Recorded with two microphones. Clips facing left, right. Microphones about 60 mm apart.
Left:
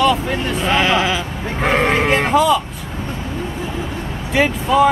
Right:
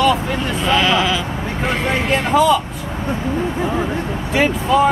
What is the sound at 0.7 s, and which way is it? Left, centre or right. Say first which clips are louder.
Speech: even; left.